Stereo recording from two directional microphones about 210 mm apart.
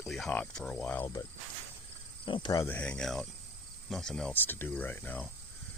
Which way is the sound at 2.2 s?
20° left (ahead or behind).